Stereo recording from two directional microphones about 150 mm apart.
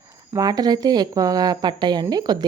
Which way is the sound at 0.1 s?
25° right (ahead or behind).